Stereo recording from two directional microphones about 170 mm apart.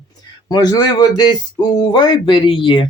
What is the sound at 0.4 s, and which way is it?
Speech, 25° left (ahead or behind).